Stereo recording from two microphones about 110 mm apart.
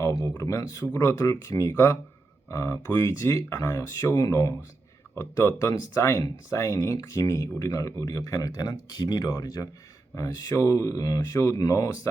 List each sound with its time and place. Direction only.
0.0 s speech: 25° left (ahead or behind)